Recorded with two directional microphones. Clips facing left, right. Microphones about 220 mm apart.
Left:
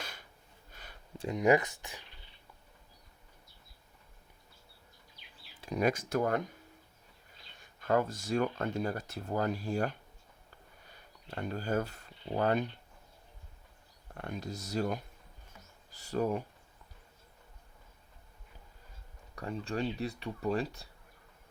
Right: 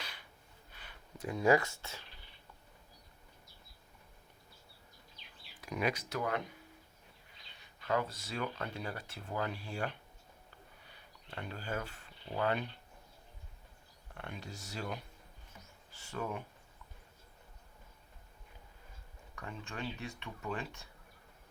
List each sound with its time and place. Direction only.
0.0 s gasp: 45° left (ahead or behind)
0.7 s a sound: 45° left (ahead or behind)
1.2 s speech: 20° left (ahead or behind)
5.5 s a sound: 30° left (ahead or behind)
5.8 s speech: 50° left (ahead or behind)
7.6 s speech: 45° left (ahead or behind)
10.8 s a sound: 45° left (ahead or behind)
14.2 s speech: 40° left (ahead or behind)
19.4 s speech: 35° left (ahead or behind)